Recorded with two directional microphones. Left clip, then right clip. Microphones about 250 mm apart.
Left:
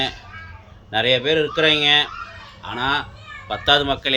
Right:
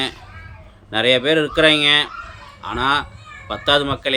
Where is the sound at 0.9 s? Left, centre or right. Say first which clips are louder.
Right 2 dB; centre.